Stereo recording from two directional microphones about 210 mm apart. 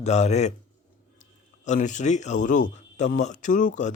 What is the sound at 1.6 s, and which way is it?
Speech, 35° left (ahead or behind).